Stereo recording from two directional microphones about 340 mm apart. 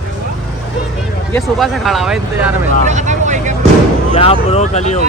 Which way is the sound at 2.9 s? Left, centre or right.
Right.